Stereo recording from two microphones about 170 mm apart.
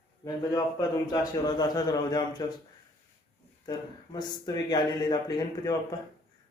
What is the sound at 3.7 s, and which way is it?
Speech, 25° left (ahead or behind).